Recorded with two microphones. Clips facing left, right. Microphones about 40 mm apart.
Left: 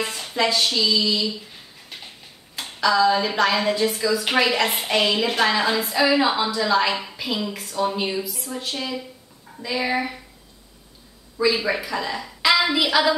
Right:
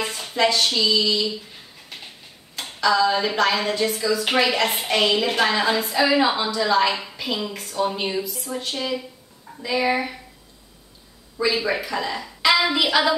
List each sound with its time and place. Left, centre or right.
0.0 s a sound: centre
2.5 s dishes: centre
4.1 s a woman's voice: centre
11.3 s a woman's voice: centre